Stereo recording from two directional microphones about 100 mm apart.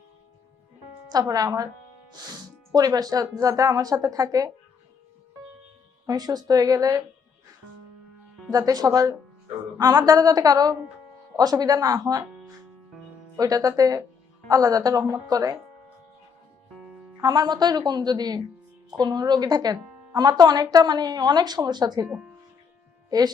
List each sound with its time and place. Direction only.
1.1 s a woman's voice: 40° right (ahead or behind)
2.7 s a woman's voice: 40° right (ahead or behind)
6.1 s a woman's voice: 40° right (ahead or behind)
8.5 s a woman's voice: 35° right (ahead or behind)
13.3 s a woman's voice: 35° right (ahead or behind)
17.2 s speech: 40° right (ahead or behind)
23.0 s speech: 40° right (ahead or behind)